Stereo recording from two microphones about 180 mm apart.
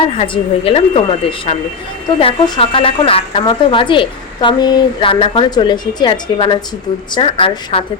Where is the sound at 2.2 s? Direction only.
30° left (ahead or behind).